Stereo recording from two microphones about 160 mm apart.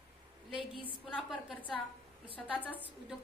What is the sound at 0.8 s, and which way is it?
Speech, 35° left (ahead or behind).